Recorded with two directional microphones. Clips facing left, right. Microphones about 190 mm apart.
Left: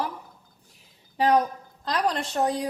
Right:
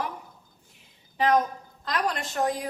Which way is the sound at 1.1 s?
35° left (ahead or behind).